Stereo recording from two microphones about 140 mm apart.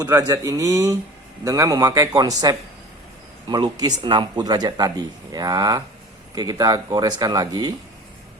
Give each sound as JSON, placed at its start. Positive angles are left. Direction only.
{"t": 0.0, "sound": "speech", "side_deg": -25}